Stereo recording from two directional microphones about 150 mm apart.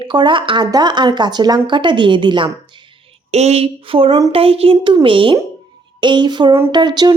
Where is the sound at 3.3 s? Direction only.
45° right (ahead or behind); by 7.1 s 30° right (ahead or behind).